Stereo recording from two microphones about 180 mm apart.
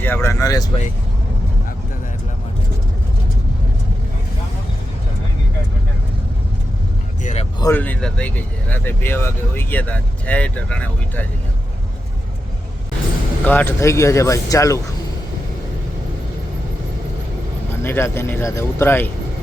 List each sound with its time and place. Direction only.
0.0 s speech: 15° left (ahead or behind)
7.2 s speech: 40° left (ahead or behind)
7.6 s speech: 10° left (ahead or behind)
13.4 s speech: 10° left (ahead or behind)
17.8 s speech: 15° left (ahead or behind)